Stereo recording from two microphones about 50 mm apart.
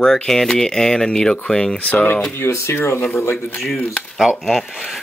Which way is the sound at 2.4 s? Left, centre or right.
Left.